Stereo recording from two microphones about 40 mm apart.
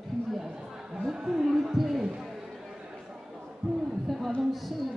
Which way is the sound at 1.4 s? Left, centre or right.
Centre.